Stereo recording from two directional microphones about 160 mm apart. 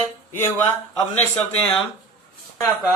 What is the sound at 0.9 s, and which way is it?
Speech, 10° left (ahead or behind).